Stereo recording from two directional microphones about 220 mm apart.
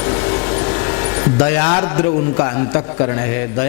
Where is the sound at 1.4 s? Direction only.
15° left (ahead or behind).